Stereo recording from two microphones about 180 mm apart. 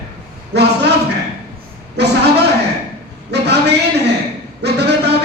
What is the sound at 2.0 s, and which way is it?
Speech, 70° right (ahead or behind).